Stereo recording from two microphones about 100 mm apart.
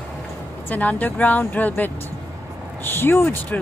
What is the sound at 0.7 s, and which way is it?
Speech, 15° left (ahead or behind).